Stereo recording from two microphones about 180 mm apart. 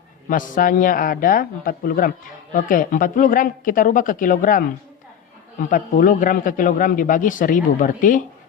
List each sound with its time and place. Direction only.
0.3 s a man's voice: 50° left (ahead or behind)
5.7 s a man's voice: 50° left (ahead or behind)